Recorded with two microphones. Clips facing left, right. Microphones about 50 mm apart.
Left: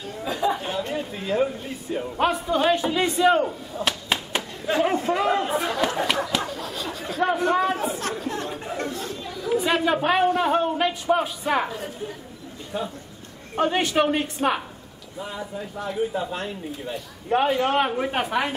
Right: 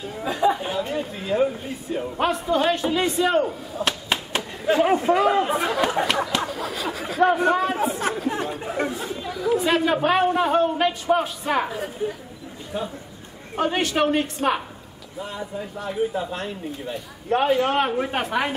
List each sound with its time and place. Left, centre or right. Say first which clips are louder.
0.0 s speech: right 4 dB; centre
4.9 s speech: right 3 dB; centre
6.0 s a sound: right 1 dB; centre
9.3 s speech: right 2 dB; centre